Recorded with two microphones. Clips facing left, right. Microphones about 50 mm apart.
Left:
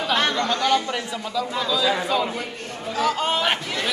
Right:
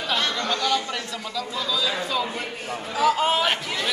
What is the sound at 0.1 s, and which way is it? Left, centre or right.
Chatter, left.